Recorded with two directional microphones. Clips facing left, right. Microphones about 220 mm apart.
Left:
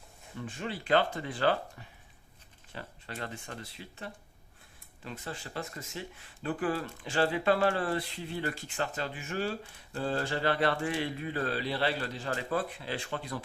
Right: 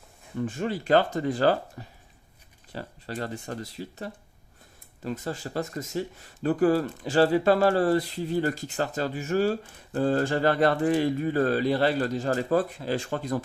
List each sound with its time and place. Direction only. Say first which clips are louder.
0.4 s speech: right 8 dB; 45° right (ahead or behind)